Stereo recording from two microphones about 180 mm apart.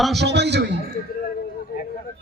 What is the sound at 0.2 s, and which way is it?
Speech, 70° right (ahead or behind).